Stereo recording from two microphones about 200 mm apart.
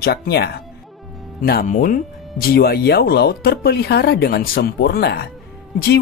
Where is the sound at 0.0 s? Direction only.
55° left (ahead or behind).